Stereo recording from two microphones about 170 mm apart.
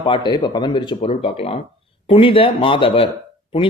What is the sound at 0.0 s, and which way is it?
A man's voice, 25° left (ahead or behind).